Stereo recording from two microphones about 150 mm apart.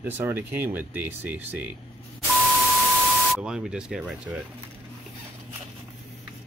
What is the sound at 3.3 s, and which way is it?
Speech, 5° right (ahead or behind).